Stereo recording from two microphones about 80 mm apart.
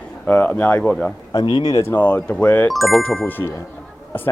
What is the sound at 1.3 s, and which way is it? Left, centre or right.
Speech, left.